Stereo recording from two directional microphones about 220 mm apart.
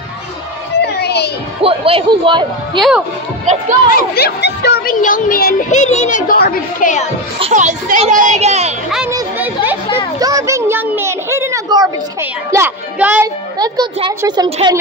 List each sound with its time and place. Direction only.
0.7 s a sound: 50° left (ahead or behind)
1.6 s speech: 25° right (ahead or behind)
3.9 s speech: 45° left (ahead or behind)
7.3 s a child's voice: 30° right (ahead or behind)
10.1 s a woman's voice: 15° right (ahead or behind)
13.6 s speech: 20° right (ahead or behind)